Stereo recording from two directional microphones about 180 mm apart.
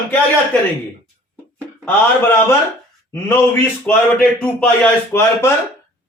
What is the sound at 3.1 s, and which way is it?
A man's voice, 15° left (ahead or behind).